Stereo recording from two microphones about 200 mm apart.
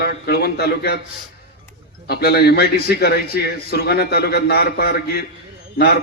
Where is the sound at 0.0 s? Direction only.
50° left (ahead or behind).